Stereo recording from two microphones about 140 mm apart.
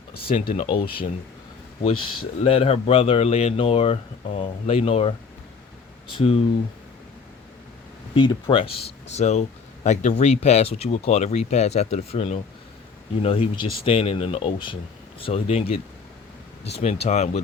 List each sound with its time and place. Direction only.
0.5 s speech: 35° left (ahead or behind)
4.6 s speech: 50° left (ahead or behind)
6.1 s speech: 45° left (ahead or behind)
8.1 s speech: 35° left (ahead or behind); by 17.4 s 50° left (ahead or behind)